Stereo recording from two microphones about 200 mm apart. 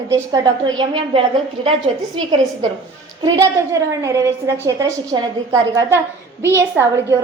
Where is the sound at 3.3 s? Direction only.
15° right (ahead or behind).